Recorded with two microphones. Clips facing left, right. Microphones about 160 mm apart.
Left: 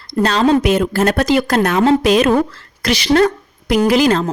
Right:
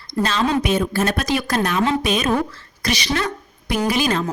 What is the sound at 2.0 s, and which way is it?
Speech, 90° left.